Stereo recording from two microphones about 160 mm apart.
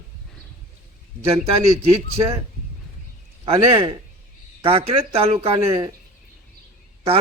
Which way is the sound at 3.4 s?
35° right (ahead or behind).